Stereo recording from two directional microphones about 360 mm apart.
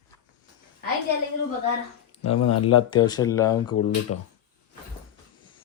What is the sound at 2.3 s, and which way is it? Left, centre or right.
Speech, left.